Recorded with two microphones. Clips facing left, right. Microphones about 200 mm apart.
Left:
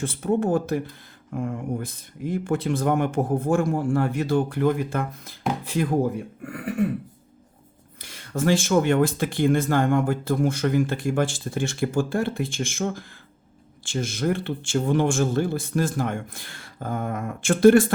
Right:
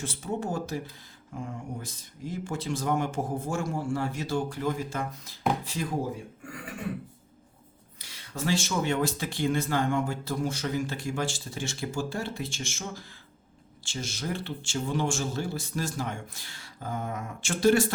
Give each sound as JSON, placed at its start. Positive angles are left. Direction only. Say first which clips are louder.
{"t": 0.0, "sound": "speech", "louder": "left 9 dB", "side_deg": 55}
{"t": 7.9, "sound": "speech", "louder": "left 9 dB", "side_deg": 55}